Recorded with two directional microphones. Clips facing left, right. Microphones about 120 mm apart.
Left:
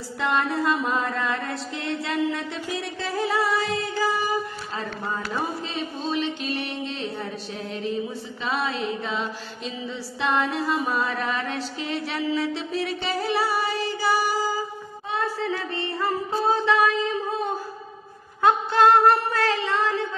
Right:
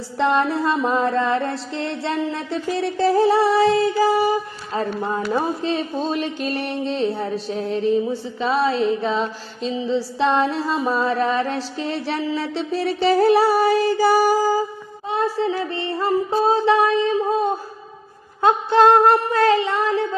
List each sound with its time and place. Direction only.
0.2 s a sound: 30° right (ahead or behind)
15.0 s music: 25° right (ahead or behind)
18.4 s music: 25° right (ahead or behind)